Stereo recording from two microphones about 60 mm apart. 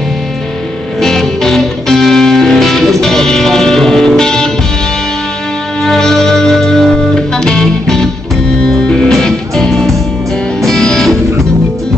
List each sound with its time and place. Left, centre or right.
1.0 s music: centre
5.8 s music: centre